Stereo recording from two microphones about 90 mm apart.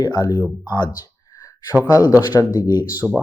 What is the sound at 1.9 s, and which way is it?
Speech, 40° left (ahead or behind).